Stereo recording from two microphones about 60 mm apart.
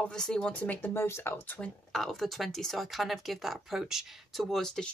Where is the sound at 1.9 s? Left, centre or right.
Centre.